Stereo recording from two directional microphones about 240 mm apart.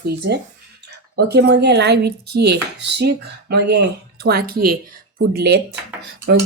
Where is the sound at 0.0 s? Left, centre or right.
Right.